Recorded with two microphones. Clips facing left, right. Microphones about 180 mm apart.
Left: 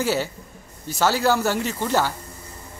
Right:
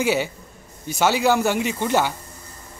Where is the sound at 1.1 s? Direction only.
Centre (ahead or behind).